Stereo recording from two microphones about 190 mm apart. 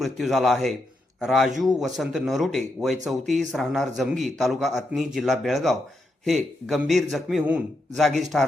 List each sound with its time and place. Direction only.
0.0 s speech: centre (ahead or behind)